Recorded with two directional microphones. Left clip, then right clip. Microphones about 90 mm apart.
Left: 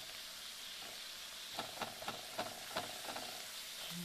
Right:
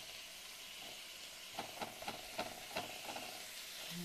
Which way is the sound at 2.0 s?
30° left (ahead or behind).